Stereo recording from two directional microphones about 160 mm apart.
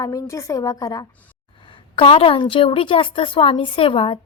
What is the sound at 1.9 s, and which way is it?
A woman's voice, 35° left (ahead or behind).